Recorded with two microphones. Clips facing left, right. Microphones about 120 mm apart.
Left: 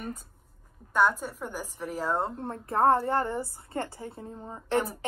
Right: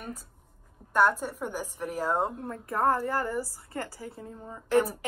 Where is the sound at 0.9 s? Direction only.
10° right (ahead or behind).